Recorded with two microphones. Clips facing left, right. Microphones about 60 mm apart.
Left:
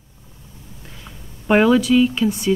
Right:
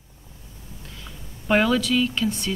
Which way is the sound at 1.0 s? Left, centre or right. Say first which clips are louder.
Left 5 dB; centre.